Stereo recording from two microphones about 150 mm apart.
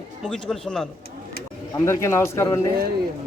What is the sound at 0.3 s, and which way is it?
Speech, 5° left (ahead or behind).